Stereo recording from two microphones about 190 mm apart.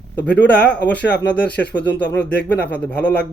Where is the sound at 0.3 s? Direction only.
65° left (ahead or behind).